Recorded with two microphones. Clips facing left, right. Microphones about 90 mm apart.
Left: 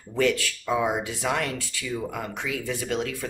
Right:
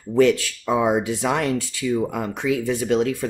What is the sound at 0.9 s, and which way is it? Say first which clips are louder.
Speech: right 6 dB; 25° right (ahead or behind).